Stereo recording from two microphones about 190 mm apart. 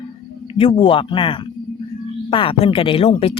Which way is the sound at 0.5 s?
30° left (ahead or behind).